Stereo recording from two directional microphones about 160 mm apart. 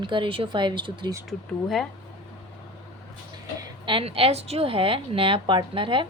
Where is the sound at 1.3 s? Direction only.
Centre (ahead or behind).